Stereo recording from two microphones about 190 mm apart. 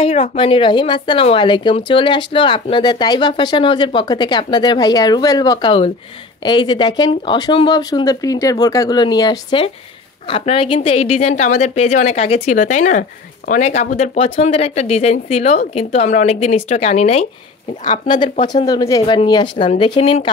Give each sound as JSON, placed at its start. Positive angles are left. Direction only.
{"t": 0.0, "sound": "a woman's voice", "side_deg": 30}